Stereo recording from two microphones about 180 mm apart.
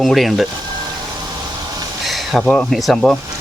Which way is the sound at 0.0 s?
Centre (ahead or behind).